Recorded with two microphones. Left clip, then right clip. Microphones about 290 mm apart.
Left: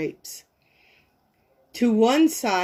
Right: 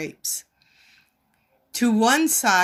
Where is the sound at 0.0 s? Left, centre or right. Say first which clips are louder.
Even; right.